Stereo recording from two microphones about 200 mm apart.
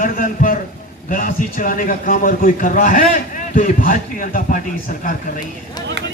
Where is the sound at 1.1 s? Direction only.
45° left (ahead or behind).